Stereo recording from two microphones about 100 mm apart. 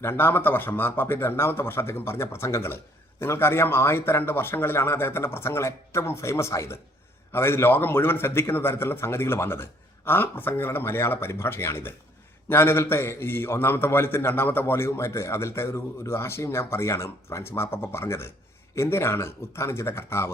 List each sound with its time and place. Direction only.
0.0 s a man's voice: 25° left (ahead or behind)